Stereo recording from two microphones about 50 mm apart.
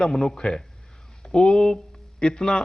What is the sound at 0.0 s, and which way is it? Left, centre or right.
Speech, centre.